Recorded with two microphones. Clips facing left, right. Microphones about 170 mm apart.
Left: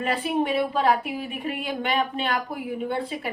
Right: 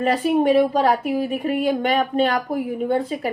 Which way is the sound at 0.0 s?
40° right (ahead or behind).